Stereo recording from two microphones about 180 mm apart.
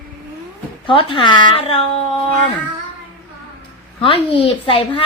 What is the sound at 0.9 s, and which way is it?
Speech, 30° left (ahead or behind).